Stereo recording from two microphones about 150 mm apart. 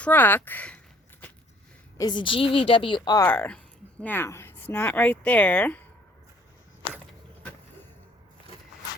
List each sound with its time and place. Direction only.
0.0 s speech: 10° left (ahead or behind)
2.0 s a woman's voice: 30° left (ahead or behind)
3.2 s speech: 15° left (ahead or behind)